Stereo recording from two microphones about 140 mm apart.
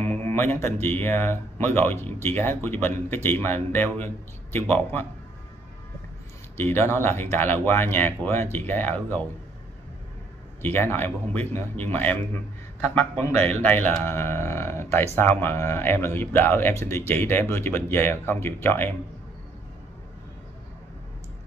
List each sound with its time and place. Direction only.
0.3 s a man's voice: 20° left (ahead or behind)
6.5 s speech: 15° left (ahead or behind)
10.6 s speech: 15° left (ahead or behind)
13.2 s speech: 15° left (ahead or behind)